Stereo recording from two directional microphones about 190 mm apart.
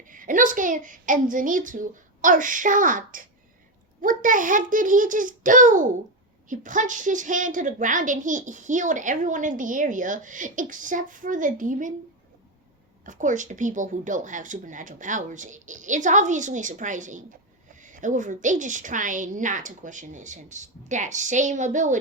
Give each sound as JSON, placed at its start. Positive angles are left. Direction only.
{"t": 0.1, "sound": "a woman's voice", "side_deg": -45}
{"t": 13.1, "sound": "a woman's voice", "side_deg": -40}